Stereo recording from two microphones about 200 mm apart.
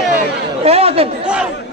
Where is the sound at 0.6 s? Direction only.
30° right (ahead or behind).